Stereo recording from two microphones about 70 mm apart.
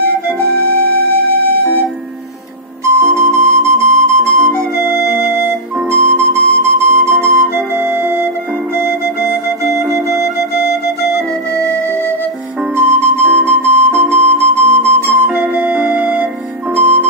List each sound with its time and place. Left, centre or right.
3.0 s flute: right
8.7 s music: right
12.7 s music: right